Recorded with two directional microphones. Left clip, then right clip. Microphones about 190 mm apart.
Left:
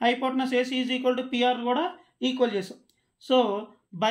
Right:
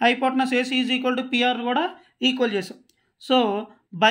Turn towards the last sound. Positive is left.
turn(degrees=-45)  # may be behind; listen again after turning